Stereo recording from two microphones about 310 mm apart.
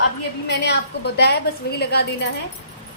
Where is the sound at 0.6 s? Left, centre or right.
Left.